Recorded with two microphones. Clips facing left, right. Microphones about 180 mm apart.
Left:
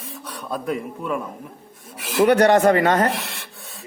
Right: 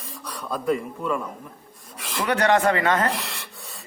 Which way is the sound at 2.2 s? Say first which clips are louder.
Left 6 dB; 45° left (ahead or behind).